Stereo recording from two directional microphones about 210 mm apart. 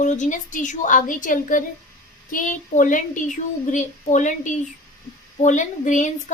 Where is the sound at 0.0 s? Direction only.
35° left (ahead or behind).